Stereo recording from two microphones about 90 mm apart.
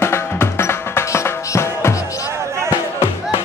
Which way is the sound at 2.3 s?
30° right (ahead or behind).